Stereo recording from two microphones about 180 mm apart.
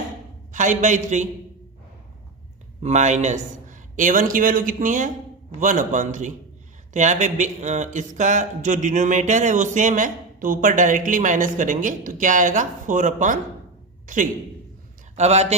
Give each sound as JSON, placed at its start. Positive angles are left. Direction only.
{"t": 0.5, "sound": "speech", "side_deg": -45}
{"t": 2.8, "sound": "speech", "side_deg": -40}
{"t": 15.1, "sound": "speech", "side_deg": -40}